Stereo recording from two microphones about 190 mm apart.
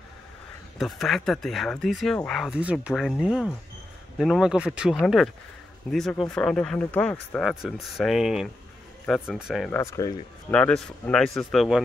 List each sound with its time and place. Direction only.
0.7 s speech: centre (ahead or behind)
9.8 s speech: 15° left (ahead or behind)
10.5 s speech: 5° left (ahead or behind)